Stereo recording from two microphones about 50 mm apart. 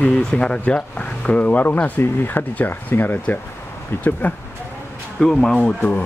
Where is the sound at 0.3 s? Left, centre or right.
Centre.